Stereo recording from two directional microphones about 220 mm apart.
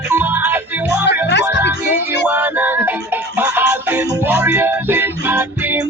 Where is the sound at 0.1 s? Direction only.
10° right (ahead or behind).